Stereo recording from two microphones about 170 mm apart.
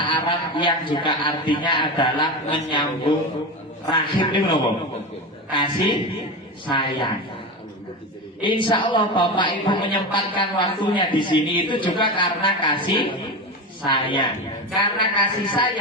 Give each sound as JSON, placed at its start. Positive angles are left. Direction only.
{"t": 0.0, "sound": "a man's voice", "side_deg": 30}
{"t": 6.7, "sound": "a man's voice", "side_deg": 30}
{"t": 8.4, "sound": "a man's voice", "side_deg": 30}